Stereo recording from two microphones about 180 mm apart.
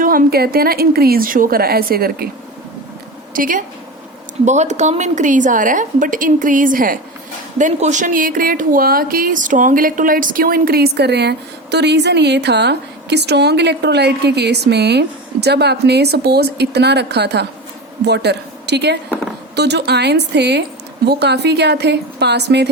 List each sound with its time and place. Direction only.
0.0 s a woman's voice: 50° right (ahead or behind)
3.3 s a woman's voice: 50° right (ahead or behind); by 22.7 s 70° right (ahead or behind)